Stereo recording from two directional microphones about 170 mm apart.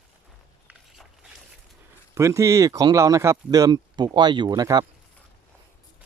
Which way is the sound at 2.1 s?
15° right (ahead or behind).